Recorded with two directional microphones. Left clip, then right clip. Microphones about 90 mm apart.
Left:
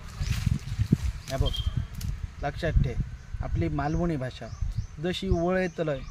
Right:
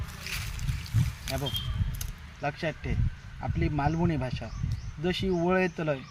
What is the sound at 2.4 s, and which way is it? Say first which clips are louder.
Speech: left 1 dB; 35° left (ahead or behind).